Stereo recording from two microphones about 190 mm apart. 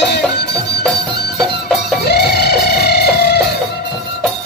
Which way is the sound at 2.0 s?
60° left (ahead or behind).